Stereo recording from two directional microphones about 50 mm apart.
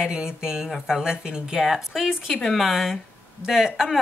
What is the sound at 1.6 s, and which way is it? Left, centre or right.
Speech, centre.